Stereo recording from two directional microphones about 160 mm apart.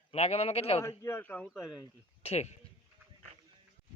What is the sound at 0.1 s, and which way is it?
Speech, 40° left (ahead or behind).